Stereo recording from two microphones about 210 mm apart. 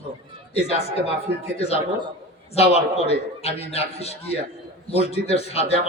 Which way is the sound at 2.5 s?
30° left (ahead or behind).